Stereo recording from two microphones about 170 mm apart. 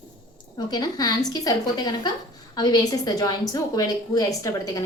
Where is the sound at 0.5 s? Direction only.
25° left (ahead or behind).